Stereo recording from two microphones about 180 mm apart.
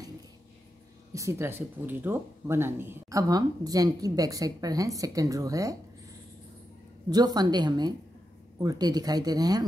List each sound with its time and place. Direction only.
1.1 s speech: 15° right (ahead or behind)
7.1 s speech: 20° right (ahead or behind)